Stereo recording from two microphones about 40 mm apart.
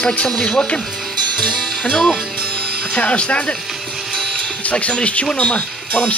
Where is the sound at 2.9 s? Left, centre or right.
Left.